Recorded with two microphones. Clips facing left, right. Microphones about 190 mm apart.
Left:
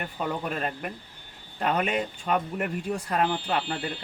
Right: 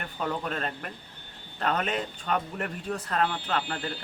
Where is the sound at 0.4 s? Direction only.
10° left (ahead or behind).